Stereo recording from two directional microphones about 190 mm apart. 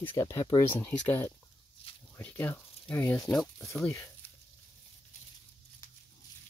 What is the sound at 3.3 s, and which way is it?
Speech, centre (ahead or behind).